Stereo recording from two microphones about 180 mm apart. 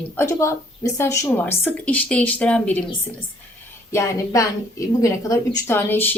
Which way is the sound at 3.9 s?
15° left (ahead or behind).